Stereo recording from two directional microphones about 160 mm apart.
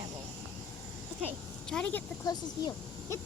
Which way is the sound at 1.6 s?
5° left (ahead or behind).